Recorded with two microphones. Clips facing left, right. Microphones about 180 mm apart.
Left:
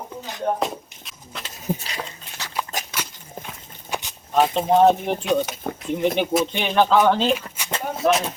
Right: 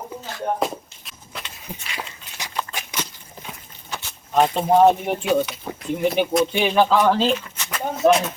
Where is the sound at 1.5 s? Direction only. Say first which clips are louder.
Left 9 dB; 40° left (ahead or behind).